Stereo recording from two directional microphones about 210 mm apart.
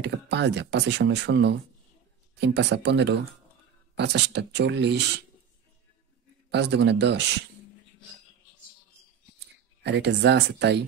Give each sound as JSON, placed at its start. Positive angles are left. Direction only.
{"t": 0.0, "sound": "speech", "side_deg": -55}
{"t": 6.5, "sound": "speech", "side_deg": -55}
{"t": 9.8, "sound": "speech", "side_deg": -55}